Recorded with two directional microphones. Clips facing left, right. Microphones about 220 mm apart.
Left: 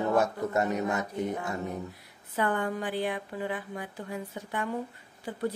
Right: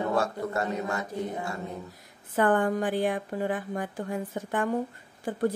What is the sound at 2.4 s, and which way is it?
A woman's voice, 50° right (ahead or behind).